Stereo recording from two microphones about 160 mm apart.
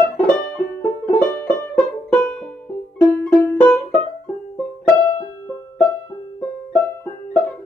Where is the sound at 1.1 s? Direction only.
20° left (ahead or behind).